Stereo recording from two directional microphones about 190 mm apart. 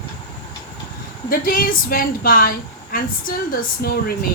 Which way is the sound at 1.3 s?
50° left (ahead or behind).